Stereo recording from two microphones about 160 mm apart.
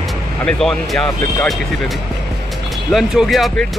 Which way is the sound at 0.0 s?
Centre (ahead or behind).